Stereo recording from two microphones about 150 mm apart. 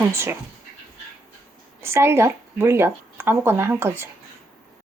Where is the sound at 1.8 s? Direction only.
15° right (ahead or behind).